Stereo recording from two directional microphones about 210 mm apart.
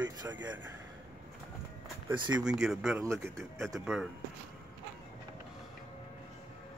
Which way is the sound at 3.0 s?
15° right (ahead or behind).